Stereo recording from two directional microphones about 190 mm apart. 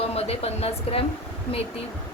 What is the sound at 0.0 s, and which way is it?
Speech, 35° left (ahead or behind).